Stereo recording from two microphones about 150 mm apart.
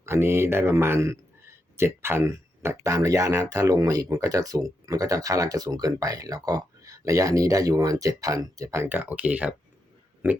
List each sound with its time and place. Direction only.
0.0 s a man's voice: 15° right (ahead or behind)